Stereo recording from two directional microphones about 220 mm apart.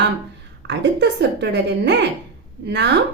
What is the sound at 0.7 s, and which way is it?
A woman's voice, 50° right (ahead or behind).